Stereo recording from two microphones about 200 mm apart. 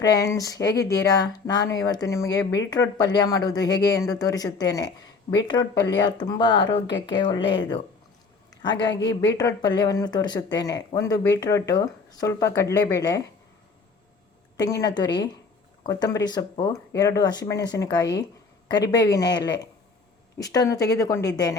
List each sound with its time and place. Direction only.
0.0 s speech: 15° left (ahead or behind)
9.4 s speech: 20° left (ahead or behind)
14.5 s speech: 15° left (ahead or behind)